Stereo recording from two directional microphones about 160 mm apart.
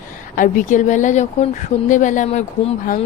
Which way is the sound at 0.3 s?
55° left (ahead or behind).